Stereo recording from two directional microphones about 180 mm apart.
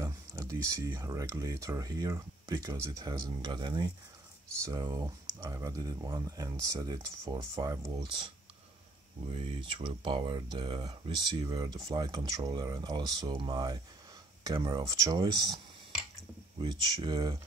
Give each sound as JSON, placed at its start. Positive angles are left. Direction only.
{"t": 0.0, "sound": "speech", "side_deg": -15}
{"t": 9.3, "sound": "speech", "side_deg": -30}